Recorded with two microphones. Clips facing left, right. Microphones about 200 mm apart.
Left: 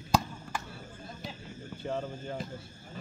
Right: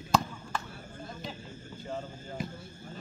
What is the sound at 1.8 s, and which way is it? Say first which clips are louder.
Speech: left 4 dB; 65° left (ahead or behind).